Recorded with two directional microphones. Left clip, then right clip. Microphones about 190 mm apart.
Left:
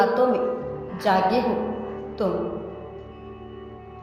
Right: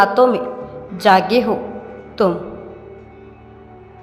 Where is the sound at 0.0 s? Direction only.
20° right (ahead or behind).